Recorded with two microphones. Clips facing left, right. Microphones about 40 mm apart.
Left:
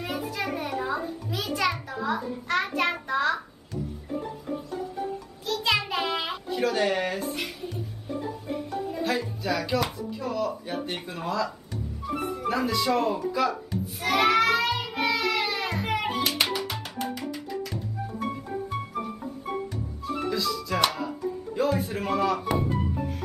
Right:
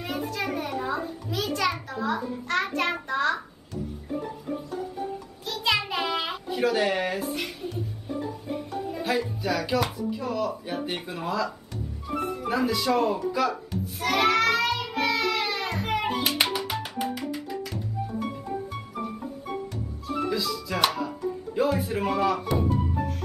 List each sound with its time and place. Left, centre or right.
0.0 s a child's voice: centre
5.4 s a child's voice: centre
8.9 s speech: centre
12.4 s music: centre
20.1 s speech: centre